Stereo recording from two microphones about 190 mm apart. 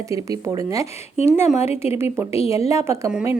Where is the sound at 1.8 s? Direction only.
15° right (ahead or behind).